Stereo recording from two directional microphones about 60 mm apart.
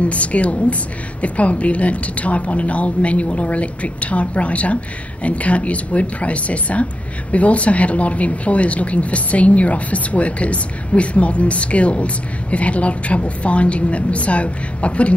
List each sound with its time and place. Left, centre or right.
0.0 s speech: left